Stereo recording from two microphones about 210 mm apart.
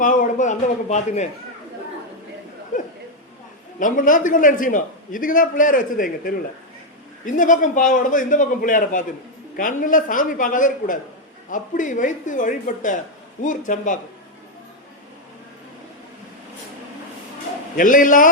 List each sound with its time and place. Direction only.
0.0 s a man's voice: 40° left (ahead or behind)
3.8 s a man's voice: 40° left (ahead or behind)
17.7 s a man's voice: 40° left (ahead or behind)